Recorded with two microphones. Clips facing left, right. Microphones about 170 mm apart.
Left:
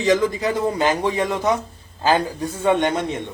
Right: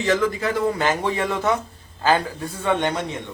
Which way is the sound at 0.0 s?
15° left (ahead or behind).